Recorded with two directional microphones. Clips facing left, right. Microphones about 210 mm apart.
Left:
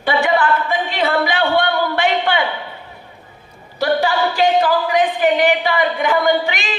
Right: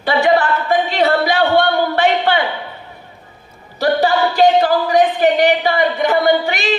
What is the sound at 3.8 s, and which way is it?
Speech, 40° right (ahead or behind).